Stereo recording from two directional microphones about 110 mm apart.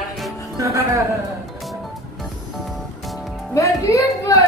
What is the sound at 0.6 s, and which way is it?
Speech, 30° right (ahead or behind).